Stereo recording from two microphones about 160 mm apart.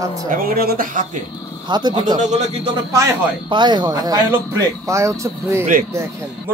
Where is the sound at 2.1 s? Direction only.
45° right (ahead or behind).